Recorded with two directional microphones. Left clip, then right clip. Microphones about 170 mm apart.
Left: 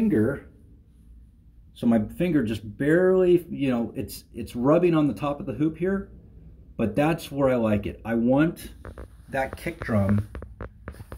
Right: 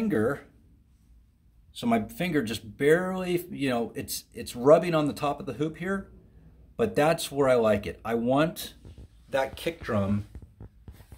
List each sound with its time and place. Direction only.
0.1 s a sound: 40° right (ahead or behind)
1.8 s speech: 35° right (ahead or behind)
9.4 s speech: 20° right (ahead or behind)